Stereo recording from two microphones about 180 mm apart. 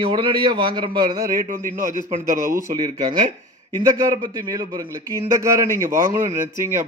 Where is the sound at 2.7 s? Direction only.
25° right (ahead or behind).